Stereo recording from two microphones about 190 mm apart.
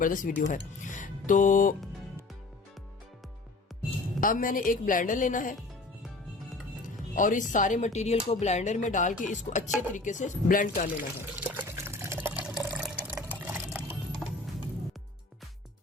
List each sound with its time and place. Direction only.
0.0 s speech: 45° left (ahead or behind)
4.2 s speech: 45° left (ahead or behind)
6.8 s speech: 45° left (ahead or behind)
10.9 s water: 10° right (ahead or behind)
13.4 s sewing machine: 10° right (ahead or behind)